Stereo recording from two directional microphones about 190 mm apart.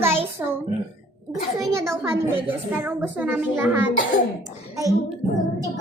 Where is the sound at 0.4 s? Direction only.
10° right (ahead or behind).